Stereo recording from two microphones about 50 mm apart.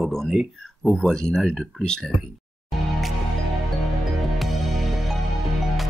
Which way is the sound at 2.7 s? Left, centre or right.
Centre.